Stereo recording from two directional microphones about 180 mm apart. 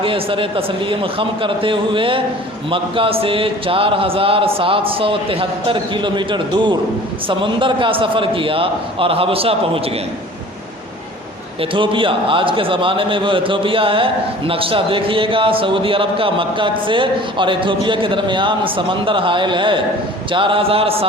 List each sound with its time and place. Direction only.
0.0 s a man's voice: 30° right (ahead or behind)
11.6 s a man's voice: 30° right (ahead or behind)